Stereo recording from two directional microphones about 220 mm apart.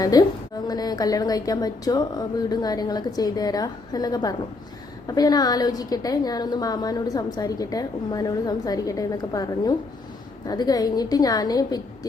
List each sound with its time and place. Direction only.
0.0 s a woman's voice: 15° left (ahead or behind)